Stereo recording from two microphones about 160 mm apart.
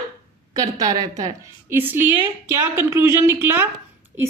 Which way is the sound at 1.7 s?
15° right (ahead or behind).